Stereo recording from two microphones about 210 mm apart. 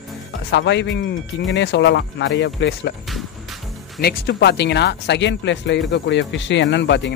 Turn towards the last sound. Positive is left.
turn(degrees=55)  # may be behind; listen again after turning